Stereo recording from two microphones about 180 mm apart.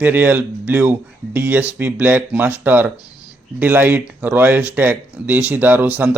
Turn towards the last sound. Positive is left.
turn(degrees=-10)  # may be behind; listen again after turning